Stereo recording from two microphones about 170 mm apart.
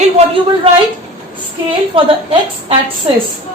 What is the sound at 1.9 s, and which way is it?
Speech, 30° right (ahead or behind).